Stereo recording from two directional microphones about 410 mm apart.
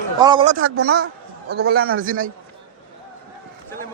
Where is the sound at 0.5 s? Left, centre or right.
Right.